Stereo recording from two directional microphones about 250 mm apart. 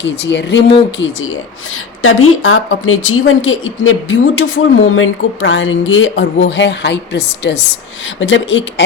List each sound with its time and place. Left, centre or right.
0.0 s speech: left